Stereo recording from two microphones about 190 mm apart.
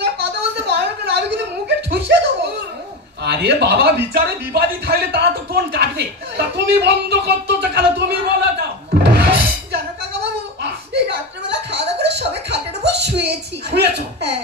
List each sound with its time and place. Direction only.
0.0 s a sound: 60° right (ahead or behind)
3.3 s speech: 60° right (ahead or behind)
8.9 s music: 60° right (ahead or behind)
11.4 s music: 65° right (ahead or behind)